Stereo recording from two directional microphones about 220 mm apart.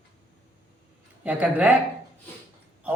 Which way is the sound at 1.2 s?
5° right (ahead or behind).